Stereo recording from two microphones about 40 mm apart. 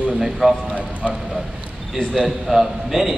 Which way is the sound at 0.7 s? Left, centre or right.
Right.